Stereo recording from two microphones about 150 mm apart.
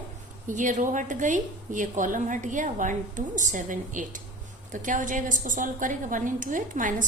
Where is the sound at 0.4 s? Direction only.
55° right (ahead or behind).